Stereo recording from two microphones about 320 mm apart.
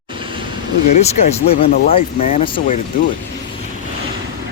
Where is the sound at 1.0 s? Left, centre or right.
Left.